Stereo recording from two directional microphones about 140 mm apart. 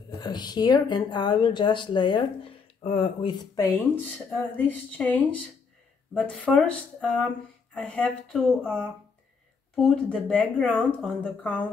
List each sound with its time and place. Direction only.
0.2 s speech: 30° left (ahead or behind)
3.7 s speech: 15° left (ahead or behind)
9.8 s speech: 5° left (ahead or behind)